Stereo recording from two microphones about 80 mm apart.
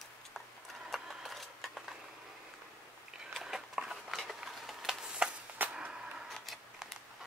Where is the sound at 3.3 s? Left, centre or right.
Centre.